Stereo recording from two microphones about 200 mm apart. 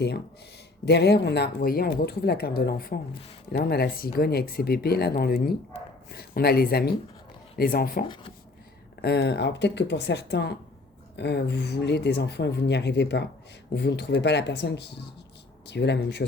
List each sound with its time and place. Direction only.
0.9 s speech: 55° left (ahead or behind)
8.0 s speech: 25° left (ahead or behind)
9.0 s speech: 55° left (ahead or behind)